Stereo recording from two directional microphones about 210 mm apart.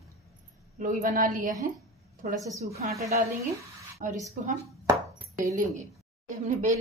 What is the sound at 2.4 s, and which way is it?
Speech, 15° right (ahead or behind).